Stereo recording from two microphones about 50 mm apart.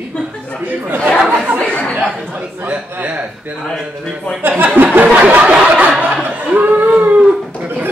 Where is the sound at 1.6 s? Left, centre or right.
Left.